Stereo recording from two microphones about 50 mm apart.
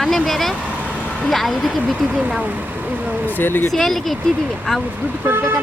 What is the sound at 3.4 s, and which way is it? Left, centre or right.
Speech, left.